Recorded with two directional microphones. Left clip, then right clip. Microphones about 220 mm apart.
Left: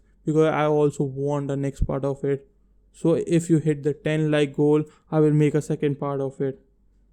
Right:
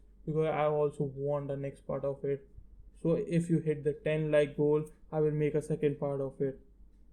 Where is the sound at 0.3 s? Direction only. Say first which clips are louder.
Left 10 dB; 50° left (ahead or behind).